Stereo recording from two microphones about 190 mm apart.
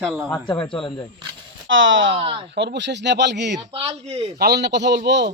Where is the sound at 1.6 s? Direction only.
85° right.